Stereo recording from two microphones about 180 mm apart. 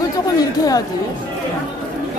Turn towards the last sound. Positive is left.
turn(degrees=20)  # may be behind; listen again after turning